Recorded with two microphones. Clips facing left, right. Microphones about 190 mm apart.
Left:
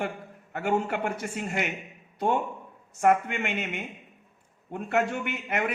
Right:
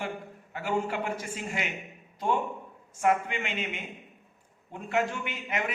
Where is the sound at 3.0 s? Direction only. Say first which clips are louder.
Left 3 dB; 55° left (ahead or behind).